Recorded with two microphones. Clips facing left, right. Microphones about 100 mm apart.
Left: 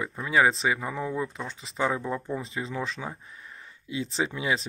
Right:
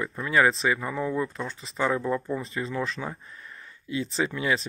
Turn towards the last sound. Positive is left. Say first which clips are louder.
# right 1 dB
turn(degrees=15)  # may be behind; listen again after turning